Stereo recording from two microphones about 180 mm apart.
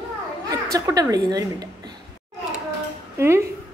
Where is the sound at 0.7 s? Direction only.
20° right (ahead or behind).